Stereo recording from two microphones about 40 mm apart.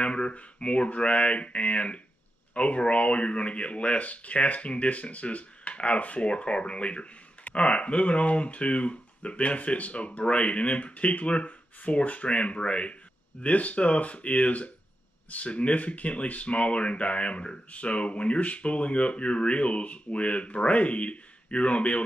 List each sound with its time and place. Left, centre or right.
0.0 s speech: left